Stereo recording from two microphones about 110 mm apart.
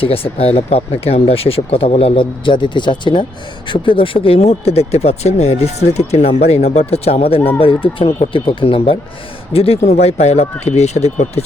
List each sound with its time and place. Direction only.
0.0 s speech: 60° left (ahead or behind); by 11.4 s 85° left